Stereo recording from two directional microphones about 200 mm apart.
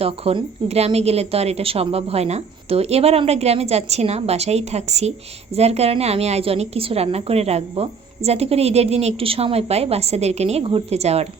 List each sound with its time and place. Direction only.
0.0 s a woman's voice: 30° right (ahead or behind)